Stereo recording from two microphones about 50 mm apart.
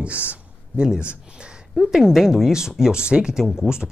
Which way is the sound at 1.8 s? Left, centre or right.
Centre.